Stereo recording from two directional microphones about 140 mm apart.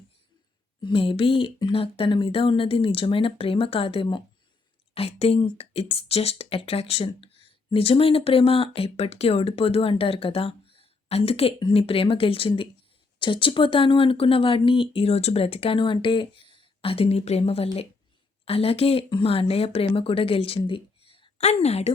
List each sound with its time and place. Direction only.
0.8 s speech: 40° left (ahead or behind)